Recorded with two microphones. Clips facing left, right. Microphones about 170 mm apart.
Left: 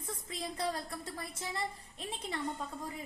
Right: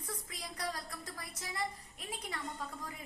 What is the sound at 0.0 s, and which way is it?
A woman's voice, 25° left (ahead or behind).